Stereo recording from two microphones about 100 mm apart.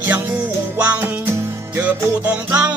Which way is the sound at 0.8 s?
15° right (ahead or behind).